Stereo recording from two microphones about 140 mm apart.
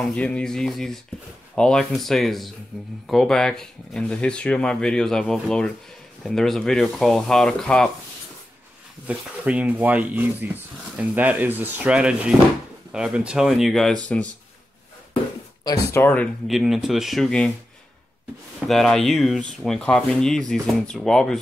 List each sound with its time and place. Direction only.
0.0 s speech: 5° left (ahead or behind)
9.0 s speech: 10° right (ahead or behind); by 14.3 s 10° left (ahead or behind)
15.6 s speech: 20° left (ahead or behind)
16.4 s speech: centre (ahead or behind)
18.7 s speech: centre (ahead or behind)